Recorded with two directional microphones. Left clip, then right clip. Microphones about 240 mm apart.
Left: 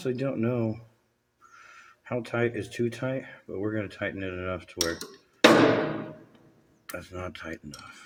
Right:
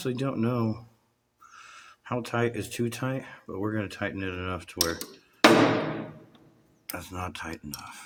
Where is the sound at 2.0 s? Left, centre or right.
Right.